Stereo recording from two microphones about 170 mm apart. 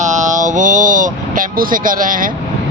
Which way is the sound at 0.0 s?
45° right (ahead or behind).